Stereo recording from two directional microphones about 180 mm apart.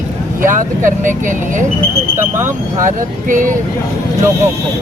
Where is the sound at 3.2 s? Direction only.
50° right (ahead or behind).